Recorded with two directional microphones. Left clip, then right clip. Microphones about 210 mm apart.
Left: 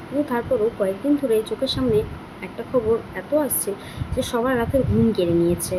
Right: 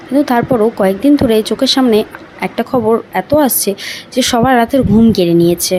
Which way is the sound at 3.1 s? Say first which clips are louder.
Right 11 dB; 50° right (ahead or behind).